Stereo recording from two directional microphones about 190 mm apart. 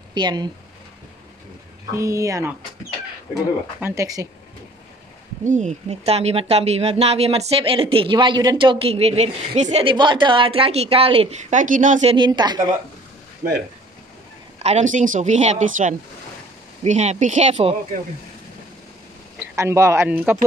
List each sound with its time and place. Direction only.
0.1 s speech: 25° right (ahead or behind)
1.9 s speech: 15° right (ahead or behind)
3.8 s speech: 15° right (ahead or behind)
5.4 s speech: 40° right (ahead or behind)
12.3 s a woman's voice: 20° right (ahead or behind)
14.6 s speech: 35° right (ahead or behind)
19.5 s speech: 15° right (ahead or behind)